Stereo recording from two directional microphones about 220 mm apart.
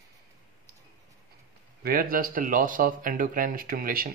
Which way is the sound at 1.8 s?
40° right (ahead or behind).